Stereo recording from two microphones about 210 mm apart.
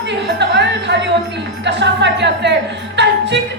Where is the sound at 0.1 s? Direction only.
55° right (ahead or behind).